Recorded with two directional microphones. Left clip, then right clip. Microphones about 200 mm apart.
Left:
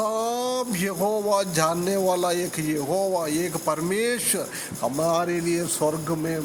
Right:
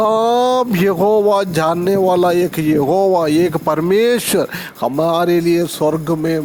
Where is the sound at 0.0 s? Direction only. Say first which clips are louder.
Right 12 dB; 40° right (ahead or behind).